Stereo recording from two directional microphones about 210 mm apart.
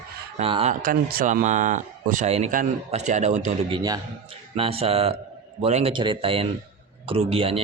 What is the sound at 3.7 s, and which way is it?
A man's voice, 20° right (ahead or behind).